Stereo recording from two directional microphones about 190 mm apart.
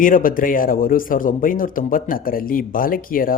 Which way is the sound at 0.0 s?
45° left (ahead or behind).